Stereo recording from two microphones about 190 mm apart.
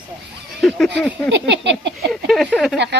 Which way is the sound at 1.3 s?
70° right (ahead or behind).